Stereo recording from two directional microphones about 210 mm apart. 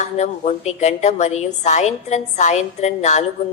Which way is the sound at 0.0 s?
35° left (ahead or behind).